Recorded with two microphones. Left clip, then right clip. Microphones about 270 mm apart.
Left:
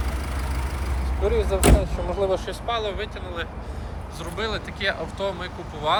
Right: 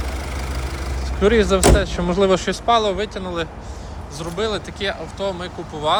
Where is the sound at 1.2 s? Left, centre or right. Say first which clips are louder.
Right 7 dB; right.